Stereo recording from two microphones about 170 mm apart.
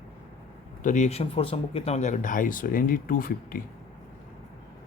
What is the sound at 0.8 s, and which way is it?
Speech, 45° left (ahead or behind).